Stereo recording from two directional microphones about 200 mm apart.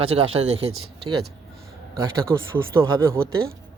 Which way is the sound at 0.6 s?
90° right.